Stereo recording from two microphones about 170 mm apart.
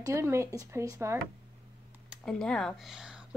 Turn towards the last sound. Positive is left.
turn(degrees=-5)  # may be behind; listen again after turning